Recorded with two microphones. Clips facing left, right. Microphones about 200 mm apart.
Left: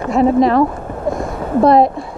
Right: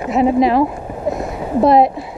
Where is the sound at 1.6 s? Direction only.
Centre (ahead or behind).